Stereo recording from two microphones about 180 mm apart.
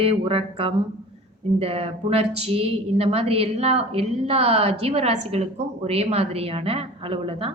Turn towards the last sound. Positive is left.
turn(degrees=-30)  # may be behind; listen again after turning